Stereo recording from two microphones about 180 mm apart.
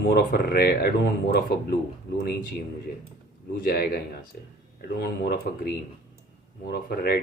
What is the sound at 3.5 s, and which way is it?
Speech, 55° left (ahead or behind).